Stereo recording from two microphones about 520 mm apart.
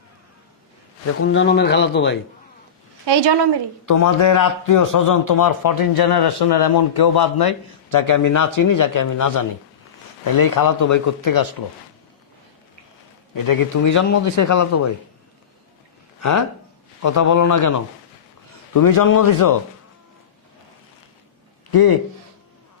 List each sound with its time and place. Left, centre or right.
1.0 s speech: left
3.1 s a woman's voice: right
3.8 s a man's voice: left
13.3 s a man's voice: left
17.0 s a man's voice: left
21.7 s speech: left